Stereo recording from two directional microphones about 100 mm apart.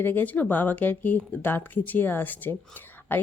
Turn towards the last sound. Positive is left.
turn(degrees=20)  # may be behind; listen again after turning